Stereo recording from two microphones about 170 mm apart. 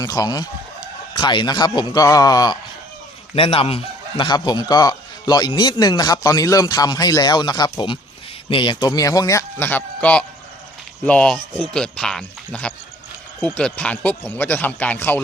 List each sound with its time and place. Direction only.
0.0 s speech: 20° left (ahead or behind)
3.3 s a man's voice: 35° left (ahead or behind); by 15.2 s 10° left (ahead or behind)